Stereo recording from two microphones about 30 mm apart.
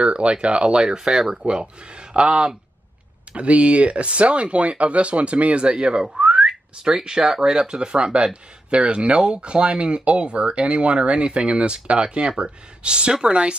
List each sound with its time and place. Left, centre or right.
0.0 s speech: right
0.8 s speech: right
3.3 s speech: right
5.7 s speech: right
6.1 s whistling: right
7.4 s speech: right